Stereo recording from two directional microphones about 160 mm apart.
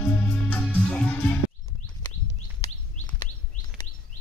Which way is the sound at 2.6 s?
30° left (ahead or behind).